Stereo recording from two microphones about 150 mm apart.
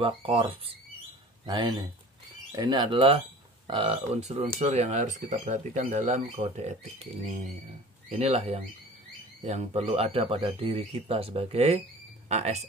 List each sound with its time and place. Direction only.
0.0 s speech: 35° right (ahead or behind)
8.1 s speech: 45° right (ahead or behind)